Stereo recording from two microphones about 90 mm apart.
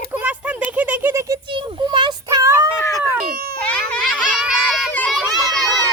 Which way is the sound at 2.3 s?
40° right (ahead or behind).